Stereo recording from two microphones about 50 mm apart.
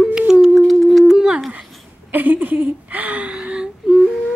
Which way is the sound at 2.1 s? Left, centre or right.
Right.